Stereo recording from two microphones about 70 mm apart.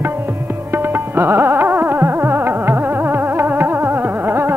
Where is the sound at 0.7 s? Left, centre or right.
Right.